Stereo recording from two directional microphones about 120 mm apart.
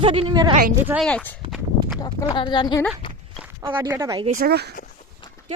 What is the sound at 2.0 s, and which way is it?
Speech, 35° left (ahead or behind).